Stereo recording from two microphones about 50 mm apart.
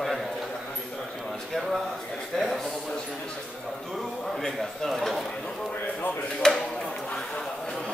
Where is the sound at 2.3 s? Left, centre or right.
Centre.